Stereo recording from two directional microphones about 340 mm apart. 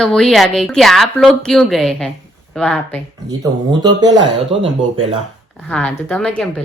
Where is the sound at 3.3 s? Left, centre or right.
Centre.